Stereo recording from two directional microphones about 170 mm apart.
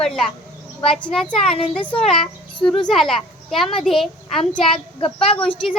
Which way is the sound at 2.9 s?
Centre (ahead or behind).